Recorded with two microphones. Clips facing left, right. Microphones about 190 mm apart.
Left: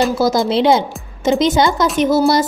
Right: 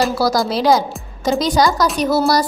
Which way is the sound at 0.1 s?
20° left (ahead or behind).